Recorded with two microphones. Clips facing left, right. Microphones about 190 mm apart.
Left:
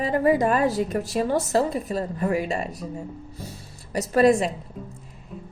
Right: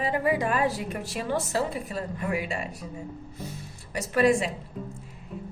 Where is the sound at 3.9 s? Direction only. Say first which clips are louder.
Left 4 dB; 40° left (ahead or behind).